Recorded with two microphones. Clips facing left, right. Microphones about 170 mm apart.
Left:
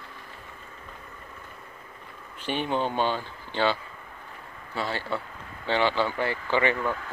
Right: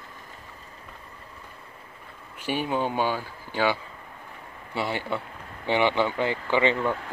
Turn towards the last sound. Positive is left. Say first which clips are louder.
# right 2 dB
turn(degrees=-30)  # may be behind; listen again after turning